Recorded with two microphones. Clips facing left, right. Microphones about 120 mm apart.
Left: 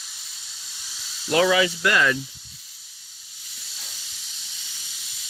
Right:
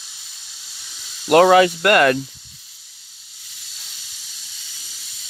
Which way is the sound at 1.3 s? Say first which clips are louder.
Right 8 dB; 55° right (ahead or behind).